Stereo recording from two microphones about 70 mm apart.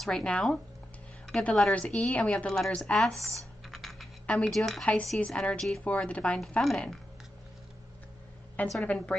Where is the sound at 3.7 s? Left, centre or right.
Centre.